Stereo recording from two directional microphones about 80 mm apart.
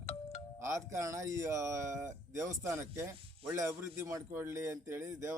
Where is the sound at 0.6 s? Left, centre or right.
Right.